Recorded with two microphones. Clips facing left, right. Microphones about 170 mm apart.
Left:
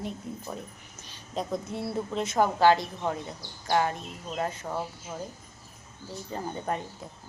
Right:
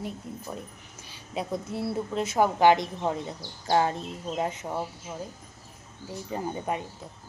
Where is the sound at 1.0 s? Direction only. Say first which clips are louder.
Even; 10° right (ahead or behind).